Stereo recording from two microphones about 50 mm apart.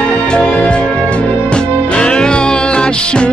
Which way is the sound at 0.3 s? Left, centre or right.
Centre.